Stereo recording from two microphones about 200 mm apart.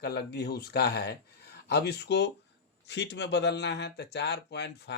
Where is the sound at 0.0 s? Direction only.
55° left (ahead or behind).